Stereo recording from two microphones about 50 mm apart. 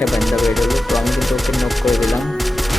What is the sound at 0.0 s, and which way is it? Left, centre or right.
Speech, centre.